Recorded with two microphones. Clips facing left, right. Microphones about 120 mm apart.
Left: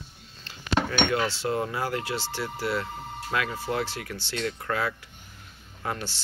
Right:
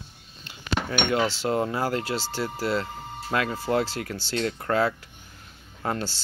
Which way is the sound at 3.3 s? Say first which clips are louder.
Right 4 dB; 35° right (ahead or behind).